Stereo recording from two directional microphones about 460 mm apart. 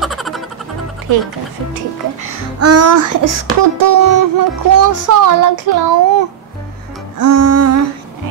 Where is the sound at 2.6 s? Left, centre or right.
Right.